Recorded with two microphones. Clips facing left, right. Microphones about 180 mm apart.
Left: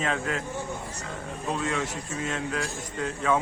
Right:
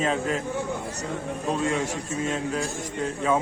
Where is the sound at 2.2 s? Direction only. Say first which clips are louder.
Right 3 dB; 25° right (ahead or behind).